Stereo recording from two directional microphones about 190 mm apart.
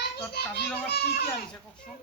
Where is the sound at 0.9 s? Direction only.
60° left (ahead or behind).